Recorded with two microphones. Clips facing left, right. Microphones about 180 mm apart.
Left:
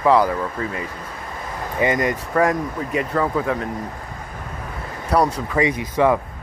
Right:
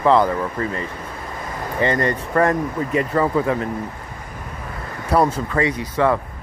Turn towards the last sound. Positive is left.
turn(degrees=15)  # may be behind; listen again after turning